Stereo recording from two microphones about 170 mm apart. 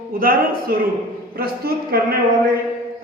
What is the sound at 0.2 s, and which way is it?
A man's voice, 60° right (ahead or behind).